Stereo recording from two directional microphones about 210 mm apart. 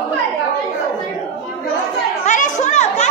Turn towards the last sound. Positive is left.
turn(degrees=35)  # may be behind; listen again after turning